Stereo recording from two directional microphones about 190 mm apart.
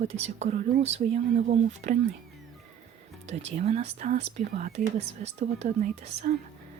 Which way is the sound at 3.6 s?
35° right (ahead or behind).